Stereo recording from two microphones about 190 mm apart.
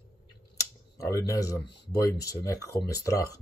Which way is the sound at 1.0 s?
15° left (ahead or behind).